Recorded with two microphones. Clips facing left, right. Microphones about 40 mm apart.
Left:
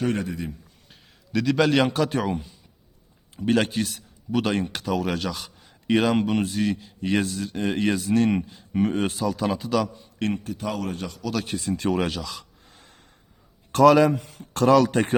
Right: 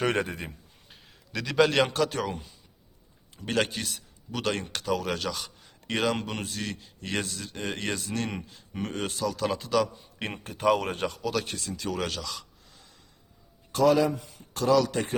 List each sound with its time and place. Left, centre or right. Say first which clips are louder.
0.0 s a man's voice: left 1 dB; right
0.9 s a man's voice: left 5 dB; centre
10.4 s speech: right 4 dB; right
11.3 s a man's voice: left 6 dB; centre
11.6 s speech: left 8 dB; left
12.0 s a man's voice: left 4 dB; centre
12.7 s gasp: left 5 dB; left
13.7 s a man's voice: left 6 dB; left